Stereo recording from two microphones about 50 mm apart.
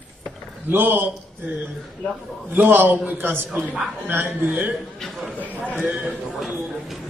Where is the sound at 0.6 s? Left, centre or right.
Right.